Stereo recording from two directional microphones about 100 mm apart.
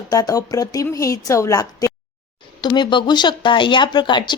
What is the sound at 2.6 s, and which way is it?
Speech, 45° left (ahead or behind).